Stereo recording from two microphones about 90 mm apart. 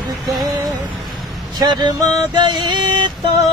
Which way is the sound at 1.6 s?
55° right (ahead or behind).